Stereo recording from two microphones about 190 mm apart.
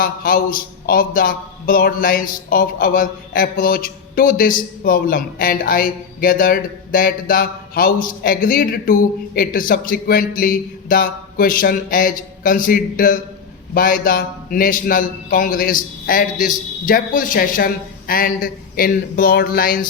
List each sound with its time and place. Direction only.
0.0 s speech: 50° left (ahead or behind)